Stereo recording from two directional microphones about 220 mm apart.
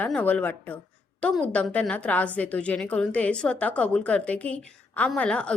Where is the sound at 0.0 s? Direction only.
5° left (ahead or behind).